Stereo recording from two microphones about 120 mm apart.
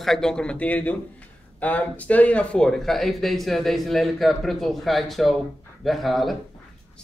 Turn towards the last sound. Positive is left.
turn(degrees=0)  # may be behind; listen again after turning